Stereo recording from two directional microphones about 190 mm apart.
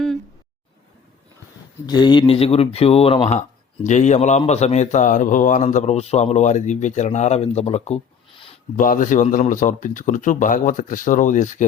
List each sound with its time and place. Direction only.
1.9 s a man's voice: 25° left (ahead or behind)
8.7 s speech: 45° left (ahead or behind)